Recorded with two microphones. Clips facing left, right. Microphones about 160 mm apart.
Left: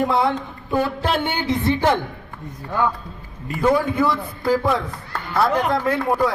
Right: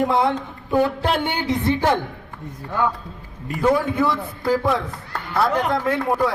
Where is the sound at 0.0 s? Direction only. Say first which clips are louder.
Even; 20° right (ahead or behind).